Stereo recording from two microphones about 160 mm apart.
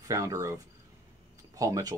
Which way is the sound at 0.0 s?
20° right (ahead or behind).